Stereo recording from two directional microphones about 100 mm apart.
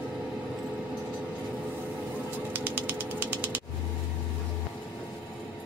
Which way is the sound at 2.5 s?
20° right (ahead or behind).